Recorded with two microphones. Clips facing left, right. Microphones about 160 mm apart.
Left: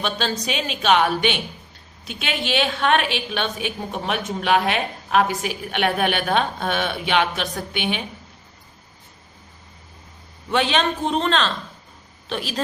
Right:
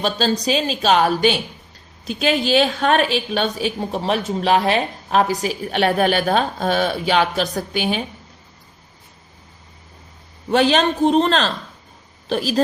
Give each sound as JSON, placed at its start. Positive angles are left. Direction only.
{"t": 0.0, "sound": "a woman's voice", "side_deg": -35}
{"t": 10.5, "sound": "a woman's voice", "side_deg": -40}